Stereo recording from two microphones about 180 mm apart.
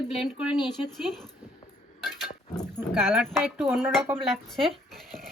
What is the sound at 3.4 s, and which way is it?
Speech, 10° right (ahead or behind).